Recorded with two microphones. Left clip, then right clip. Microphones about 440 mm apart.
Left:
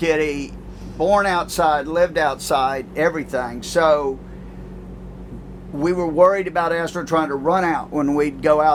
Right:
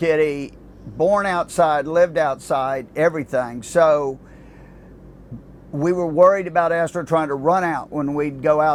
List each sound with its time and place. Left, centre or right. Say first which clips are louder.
0.0 s speech: right 1 dB; right
5.8 s speech: right 1 dB; right
7.6 s speech: left 2 dB; right